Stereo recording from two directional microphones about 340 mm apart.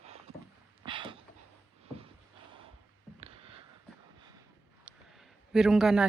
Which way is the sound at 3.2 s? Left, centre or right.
Centre.